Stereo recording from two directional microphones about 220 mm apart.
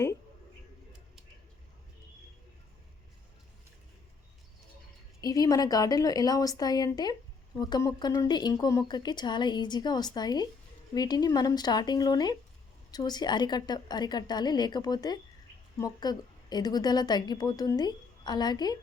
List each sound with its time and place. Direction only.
5.2 s a woman's voice: 15° left (ahead or behind)